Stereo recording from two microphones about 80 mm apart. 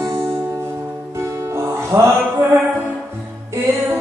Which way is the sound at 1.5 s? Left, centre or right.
Right.